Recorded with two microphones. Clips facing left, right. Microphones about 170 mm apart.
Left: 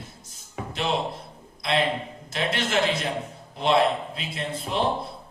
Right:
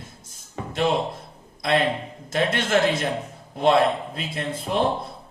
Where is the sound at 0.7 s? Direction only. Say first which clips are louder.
Right 6 dB; 50° right (ahead or behind).